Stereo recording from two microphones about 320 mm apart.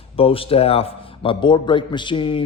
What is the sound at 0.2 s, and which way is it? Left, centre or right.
A man's voice, centre.